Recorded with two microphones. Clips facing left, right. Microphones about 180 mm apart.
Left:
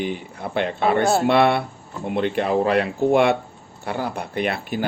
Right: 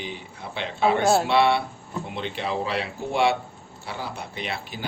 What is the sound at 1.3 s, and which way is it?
A man's voice, 55° left (ahead or behind).